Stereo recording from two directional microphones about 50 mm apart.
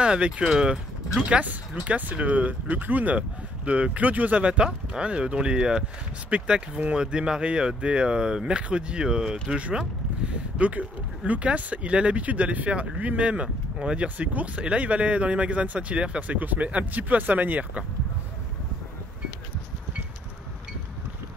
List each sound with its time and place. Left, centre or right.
0.0 s speech: centre